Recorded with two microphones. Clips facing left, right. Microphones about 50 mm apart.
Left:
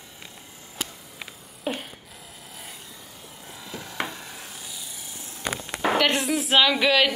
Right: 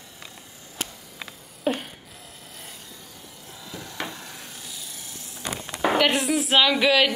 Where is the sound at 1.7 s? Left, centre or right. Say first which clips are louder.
Right 4 dB; centre.